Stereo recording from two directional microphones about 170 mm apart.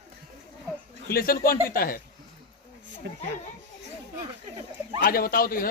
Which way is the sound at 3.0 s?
90° right.